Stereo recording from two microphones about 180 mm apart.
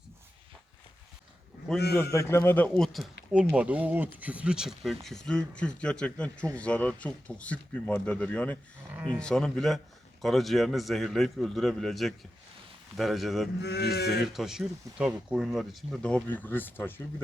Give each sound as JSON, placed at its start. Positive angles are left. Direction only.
{"t": 2.1, "sound": "speech", "side_deg": 15}
{"t": 13.6, "sound": "speech", "side_deg": 65}
{"t": 14.3, "sound": "speech", "side_deg": 0}